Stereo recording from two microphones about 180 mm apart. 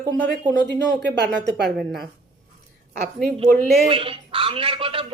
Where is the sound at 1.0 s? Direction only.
75° right (ahead or behind).